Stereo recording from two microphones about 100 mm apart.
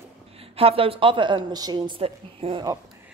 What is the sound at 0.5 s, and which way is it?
A woman's voice, 70° right (ahead or behind).